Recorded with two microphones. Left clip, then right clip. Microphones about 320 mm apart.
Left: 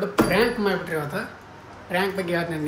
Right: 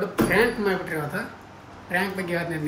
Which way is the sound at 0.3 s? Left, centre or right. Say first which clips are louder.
Even; centre.